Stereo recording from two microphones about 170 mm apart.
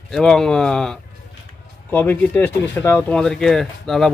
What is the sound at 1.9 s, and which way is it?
Speech, 10° left (ahead or behind).